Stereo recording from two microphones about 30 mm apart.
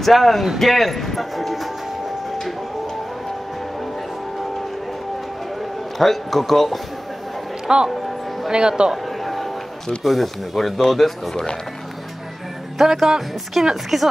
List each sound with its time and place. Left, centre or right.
0.0 s speech: centre
5.9 s speech: centre
7.6 s speech: right
9.2 s a sound: centre
10.0 s speech: centre
12.8 s a woman's voice: centre